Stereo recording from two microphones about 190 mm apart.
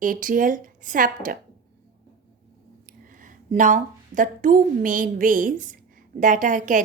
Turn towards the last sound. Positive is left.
turn(degrees=-40)  # may be behind; listen again after turning